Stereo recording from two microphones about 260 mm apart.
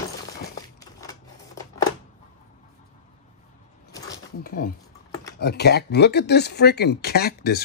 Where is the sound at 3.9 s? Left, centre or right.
Centre.